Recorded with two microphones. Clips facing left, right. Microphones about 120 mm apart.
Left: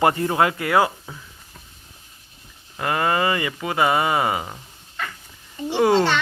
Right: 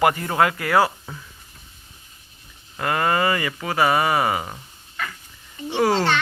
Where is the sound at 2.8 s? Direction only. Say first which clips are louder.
Even; 15° left (ahead or behind).